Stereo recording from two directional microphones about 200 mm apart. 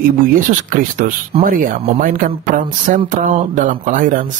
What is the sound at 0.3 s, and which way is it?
Speech, 40° right (ahead or behind).